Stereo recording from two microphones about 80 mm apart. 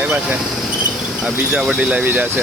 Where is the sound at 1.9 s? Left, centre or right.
Right.